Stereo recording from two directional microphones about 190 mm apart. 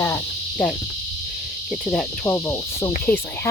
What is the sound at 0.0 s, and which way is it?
Cricket, 15° left (ahead or behind).